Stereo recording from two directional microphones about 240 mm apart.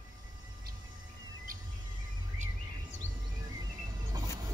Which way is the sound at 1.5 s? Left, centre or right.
Right.